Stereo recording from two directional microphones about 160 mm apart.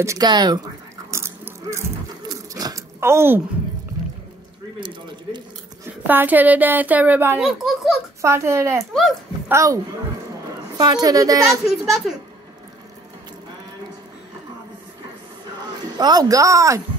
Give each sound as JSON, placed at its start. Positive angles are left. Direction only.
{"t": 0.0, "sound": "a woman's voice", "side_deg": -20}
{"t": 1.1, "sound": "a sound", "side_deg": -15}
{"t": 4.7, "sound": "speech", "side_deg": -30}
{"t": 6.0, "sound": "a woman's voice", "side_deg": -10}
{"t": 7.4, "sound": "a child's voice", "side_deg": 0}
{"t": 8.2, "sound": "a woman's voice", "side_deg": -15}
{"t": 10.8, "sound": "a woman's voice", "side_deg": -25}
{"t": 11.8, "sound": "a child's voice", "side_deg": 0}
{"t": 16.0, "sound": "a woman's voice", "side_deg": -25}